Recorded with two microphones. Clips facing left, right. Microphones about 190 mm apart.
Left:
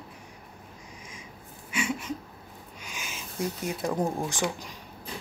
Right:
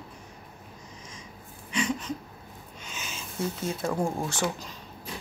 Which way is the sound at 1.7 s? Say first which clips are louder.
Right 1 dB; 10° left (ahead or behind).